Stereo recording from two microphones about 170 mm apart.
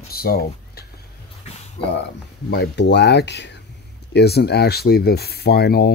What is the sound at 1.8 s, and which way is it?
Speech, 85° left.